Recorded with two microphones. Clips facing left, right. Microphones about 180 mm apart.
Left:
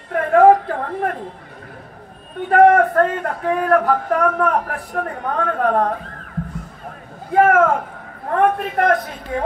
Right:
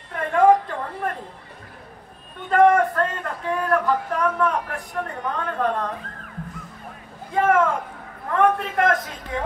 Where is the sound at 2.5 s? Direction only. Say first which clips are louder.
Left 4 dB; 60° left (ahead or behind).